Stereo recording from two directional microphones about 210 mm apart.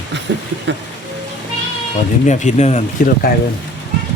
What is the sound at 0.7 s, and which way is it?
Speech, 60° right (ahead or behind).